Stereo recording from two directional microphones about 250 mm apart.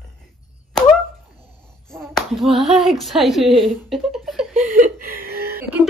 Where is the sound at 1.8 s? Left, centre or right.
Centre.